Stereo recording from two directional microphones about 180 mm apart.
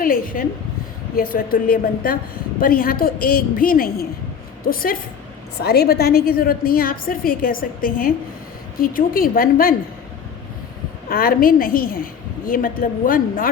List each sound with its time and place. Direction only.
0.0 s a woman's voice: 50° left (ahead or behind)
11.1 s a woman's voice: 55° left (ahead or behind)